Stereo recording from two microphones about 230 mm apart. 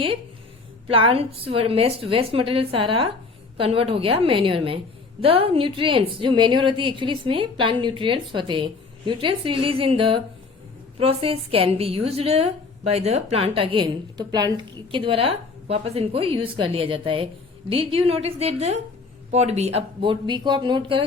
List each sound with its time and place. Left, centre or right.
0.9 s a woman's voice: right